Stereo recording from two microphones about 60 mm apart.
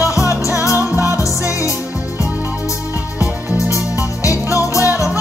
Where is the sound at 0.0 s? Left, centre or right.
Left.